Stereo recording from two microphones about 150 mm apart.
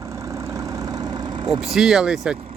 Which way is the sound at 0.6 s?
20° right (ahead or behind).